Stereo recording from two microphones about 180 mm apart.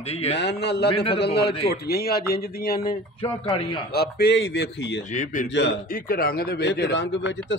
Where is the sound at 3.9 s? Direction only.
65° left (ahead or behind).